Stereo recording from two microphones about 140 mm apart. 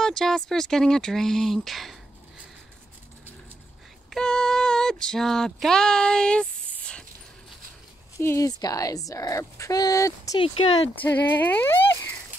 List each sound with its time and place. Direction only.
0.0 s speech: 5° left (ahead or behind)
4.1 s female singing: 5° left (ahead or behind)
8.2 s speech: 20° left (ahead or behind)
10.4 s speech: 40° left (ahead or behind)
11.0 s speech: 15° left (ahead or behind)